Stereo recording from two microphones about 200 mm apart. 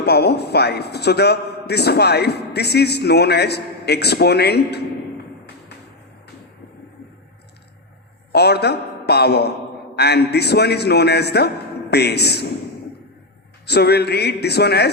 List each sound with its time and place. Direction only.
0.0 s a man's voice: 55° left (ahead or behind)
8.3 s a man's voice: 55° left (ahead or behind)
13.7 s a man's voice: 55° left (ahead or behind)